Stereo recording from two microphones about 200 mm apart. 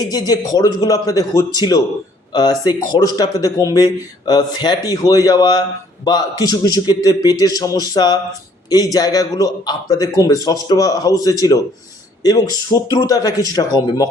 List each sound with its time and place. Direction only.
0.0 s speech: 20° left (ahead or behind)